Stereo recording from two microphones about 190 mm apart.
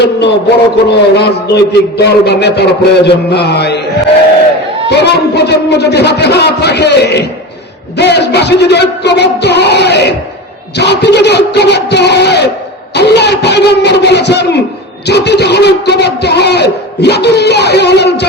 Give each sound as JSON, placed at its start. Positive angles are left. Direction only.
{"t": 0.9, "sound": "speech", "side_deg": 60}
{"t": 4.9, "sound": "speech", "side_deg": 60}